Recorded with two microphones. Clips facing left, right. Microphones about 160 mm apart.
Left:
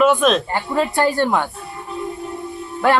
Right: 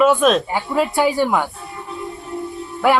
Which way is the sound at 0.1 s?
5° right (ahead or behind).